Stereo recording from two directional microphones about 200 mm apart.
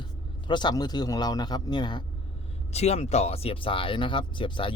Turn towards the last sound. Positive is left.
turn(degrees=25)  # may be behind; listen again after turning